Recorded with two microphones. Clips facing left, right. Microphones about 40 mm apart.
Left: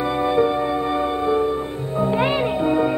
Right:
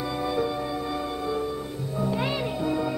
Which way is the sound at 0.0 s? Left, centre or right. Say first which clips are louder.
Left 8 dB; left.